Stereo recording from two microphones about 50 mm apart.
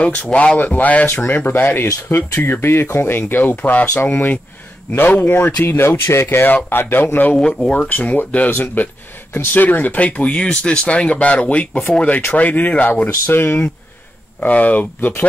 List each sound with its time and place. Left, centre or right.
0.3 s speech: left
1.5 s speech: left
2.1 s speech: left
2.4 s speech: left
6.2 s speech: left
7.3 s speech: centre
7.7 s speech: left
9.9 s speech: left
11.6 s speech: left
11.9 s speech: left
12.9 s speech: left
14.4 s speech: left